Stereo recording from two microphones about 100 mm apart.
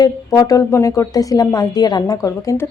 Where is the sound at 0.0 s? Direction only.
35° left (ahead or behind).